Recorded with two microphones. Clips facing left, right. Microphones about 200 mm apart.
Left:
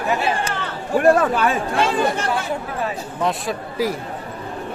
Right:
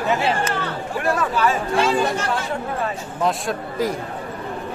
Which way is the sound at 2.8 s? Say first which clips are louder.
Even; 5° left (ahead or behind).